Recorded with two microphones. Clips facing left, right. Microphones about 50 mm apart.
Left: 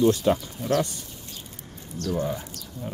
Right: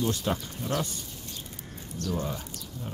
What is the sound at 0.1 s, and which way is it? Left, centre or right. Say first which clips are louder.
Speech: left 7 dB; centre.